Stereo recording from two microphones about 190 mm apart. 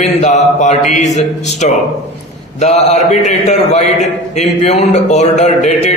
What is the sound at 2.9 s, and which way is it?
A man's voice, 40° left (ahead or behind).